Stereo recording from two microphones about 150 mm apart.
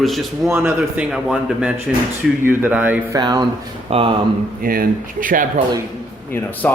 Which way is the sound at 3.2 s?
25° right (ahead or behind).